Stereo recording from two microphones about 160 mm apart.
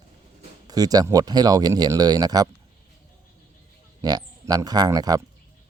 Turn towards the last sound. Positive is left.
turn(degrees=-25)  # may be behind; listen again after turning